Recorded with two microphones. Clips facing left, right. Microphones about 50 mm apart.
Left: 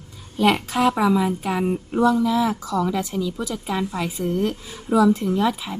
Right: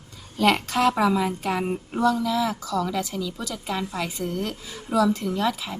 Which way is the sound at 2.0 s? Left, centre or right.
Centre.